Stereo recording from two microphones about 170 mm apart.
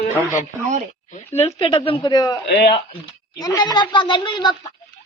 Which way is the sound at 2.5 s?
75° left (ahead or behind).